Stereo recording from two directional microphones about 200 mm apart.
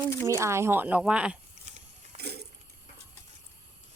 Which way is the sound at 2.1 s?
55° right (ahead or behind).